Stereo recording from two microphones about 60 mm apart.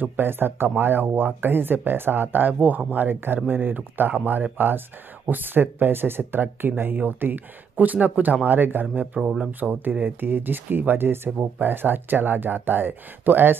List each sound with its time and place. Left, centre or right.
0.0 s speech: right
8.9 s speech: right